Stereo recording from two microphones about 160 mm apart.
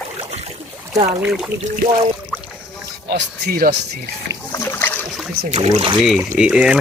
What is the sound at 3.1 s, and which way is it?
Speech, 80° right.